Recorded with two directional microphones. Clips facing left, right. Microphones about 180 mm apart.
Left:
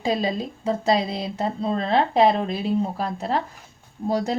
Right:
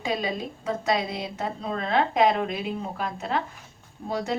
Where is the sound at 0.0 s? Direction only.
35° left (ahead or behind).